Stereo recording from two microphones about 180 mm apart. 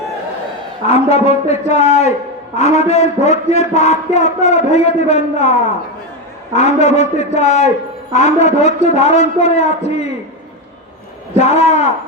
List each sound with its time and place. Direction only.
0.9 s a man's voice: 35° left (ahead or behind)
11.3 s a man's voice: 35° left (ahead or behind)